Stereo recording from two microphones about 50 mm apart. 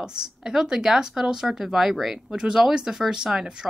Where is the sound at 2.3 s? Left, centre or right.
Centre.